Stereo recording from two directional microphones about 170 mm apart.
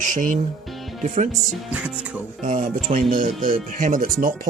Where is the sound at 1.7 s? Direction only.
10° right (ahead or behind).